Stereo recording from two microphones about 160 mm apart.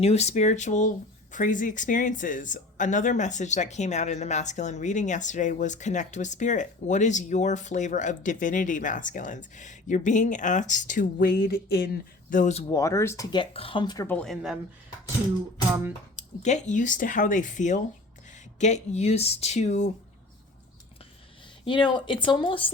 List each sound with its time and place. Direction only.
0.0 s speech: 40° left (ahead or behind); by 11.9 s 75° left (ahead or behind)
12.3 s speech: 50° left (ahead or behind)
12.7 s speech: 20° left (ahead or behind)
13.3 s speech: 35° left (ahead or behind)
14.1 s speech: 5° left (ahead or behind)
16.4 s speech: 45° left (ahead or behind)
21.6 s speech: 30° left (ahead or behind)